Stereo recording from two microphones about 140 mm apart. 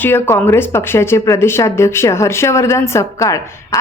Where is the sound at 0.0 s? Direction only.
15° left (ahead or behind).